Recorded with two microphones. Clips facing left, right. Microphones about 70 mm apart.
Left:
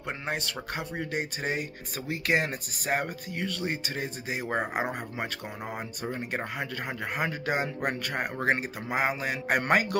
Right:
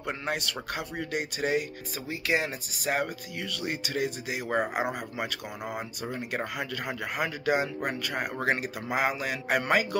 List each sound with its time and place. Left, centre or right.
0.0 s speech: left
2.0 s speech: left
9.5 s speech: left